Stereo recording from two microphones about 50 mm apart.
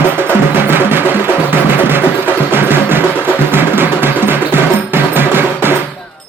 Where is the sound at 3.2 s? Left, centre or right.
Right.